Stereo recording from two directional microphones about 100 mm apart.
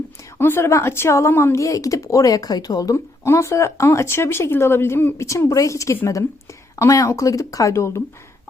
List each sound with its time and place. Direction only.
0.3 s speech: 25° left (ahead or behind)